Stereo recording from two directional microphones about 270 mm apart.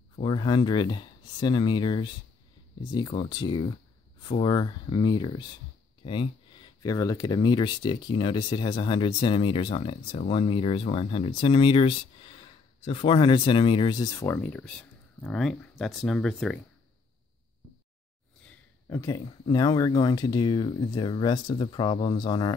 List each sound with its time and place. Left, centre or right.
0.1 s speech: centre
6.8 s speech: centre
18.9 s speech: centre